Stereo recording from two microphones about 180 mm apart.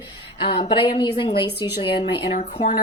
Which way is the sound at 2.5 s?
45° left (ahead or behind).